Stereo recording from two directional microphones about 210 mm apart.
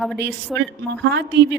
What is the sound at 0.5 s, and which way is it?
Speech, centre (ahead or behind).